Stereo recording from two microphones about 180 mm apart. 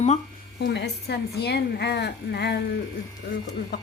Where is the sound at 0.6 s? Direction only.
70° left (ahead or behind).